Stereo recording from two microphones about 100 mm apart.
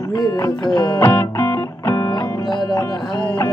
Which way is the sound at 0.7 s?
35° left (ahead or behind).